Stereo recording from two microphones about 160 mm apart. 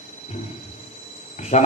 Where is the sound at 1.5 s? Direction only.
45° left (ahead or behind).